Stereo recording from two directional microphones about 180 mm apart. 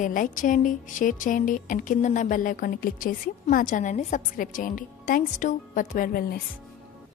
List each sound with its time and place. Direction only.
0.0 s a woman's voice: 45° left (ahead or behind)